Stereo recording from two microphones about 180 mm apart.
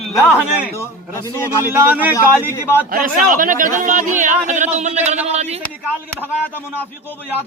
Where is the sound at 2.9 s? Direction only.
50° right (ahead or behind).